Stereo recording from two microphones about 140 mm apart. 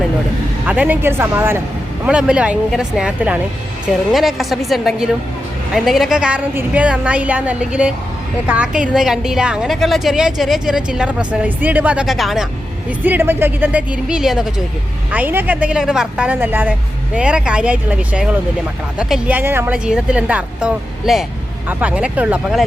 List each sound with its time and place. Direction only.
0.6 s a woman's voice: 10° right (ahead or behind)
13.1 s a woman's voice: 15° right (ahead or behind)